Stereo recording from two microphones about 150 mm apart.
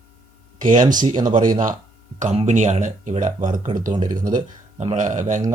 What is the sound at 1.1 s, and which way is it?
Speech, 30° right (ahead or behind).